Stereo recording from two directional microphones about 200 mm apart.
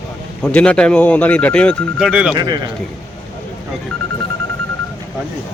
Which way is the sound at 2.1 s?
5° right (ahead or behind).